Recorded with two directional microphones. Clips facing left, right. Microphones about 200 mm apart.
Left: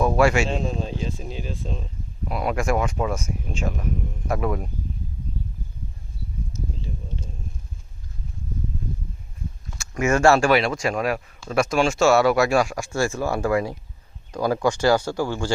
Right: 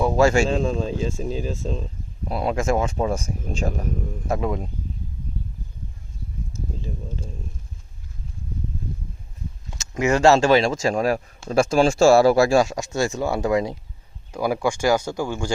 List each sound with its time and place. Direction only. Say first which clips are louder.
0.0 s a man's voice: right 1 dB; 15° right (ahead or behind)
0.3 s speech: right 4 dB; 40° right (ahead or behind)
2.3 s speech: right 1 dB; 25° right (ahead or behind)
4.3 s speech: even; 20° right (ahead or behind)
9.6 s speech: right 1 dB; 20° right (ahead or behind)